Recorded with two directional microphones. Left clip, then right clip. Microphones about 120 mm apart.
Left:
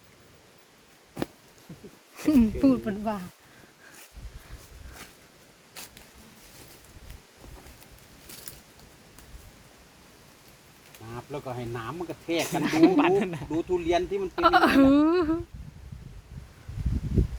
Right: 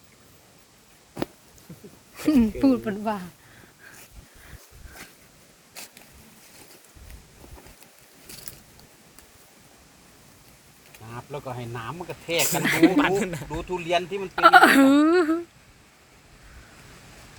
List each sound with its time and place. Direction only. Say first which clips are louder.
2.1 s speech: right 1 dB; centre (ahead or behind)
11.1 s speech: right 1 dB; 30° left (ahead or behind)
12.4 s speech: right 2 dB; centre (ahead or behind)
13.6 s speech: left 4 dB; 20° left (ahead or behind)
13.8 s speech: right 4 dB; 35° left (ahead or behind)
14.3 s speech: right 6 dB; 5° right (ahead or behind)